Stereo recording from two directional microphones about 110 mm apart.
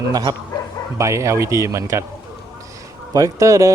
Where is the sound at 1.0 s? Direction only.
25° right (ahead or behind).